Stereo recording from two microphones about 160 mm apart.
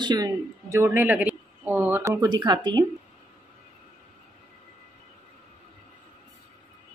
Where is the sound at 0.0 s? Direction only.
20° right (ahead or behind).